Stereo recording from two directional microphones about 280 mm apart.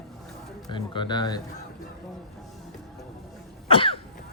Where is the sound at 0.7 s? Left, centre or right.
Centre.